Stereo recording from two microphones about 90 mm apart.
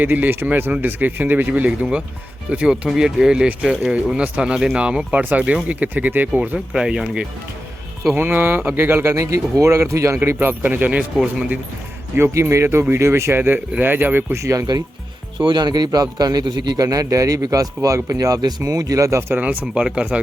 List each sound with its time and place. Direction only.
0.0 s speech: 20° right (ahead or behind)
6.7 s speech: 5° right (ahead or behind)
8.1 s speech: 25° right (ahead or behind)
10.2 s speech: 20° right (ahead or behind)
12.1 s speech: 30° right (ahead or behind)
15.4 s a man's voice: 60° right (ahead or behind); by 19.2 s 40° right (ahead or behind)
19.3 s speech: 15° right (ahead or behind)